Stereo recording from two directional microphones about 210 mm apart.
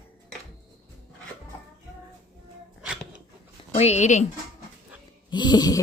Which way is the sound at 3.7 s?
30° left (ahead or behind).